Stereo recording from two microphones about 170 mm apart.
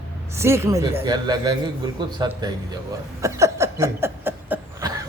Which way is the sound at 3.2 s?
15° right (ahead or behind).